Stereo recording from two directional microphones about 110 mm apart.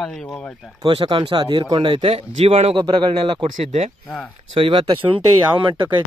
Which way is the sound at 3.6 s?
90° right.